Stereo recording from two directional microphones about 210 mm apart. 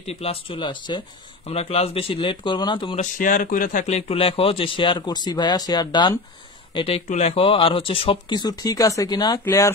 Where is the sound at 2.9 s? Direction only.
40° left (ahead or behind).